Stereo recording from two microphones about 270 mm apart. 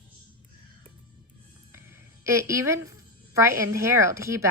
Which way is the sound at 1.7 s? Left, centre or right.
Centre.